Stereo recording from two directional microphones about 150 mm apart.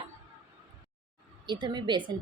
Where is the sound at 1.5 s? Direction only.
30° right (ahead or behind).